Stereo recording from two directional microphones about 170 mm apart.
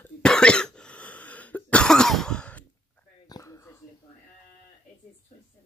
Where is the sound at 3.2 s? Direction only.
20° left (ahead or behind).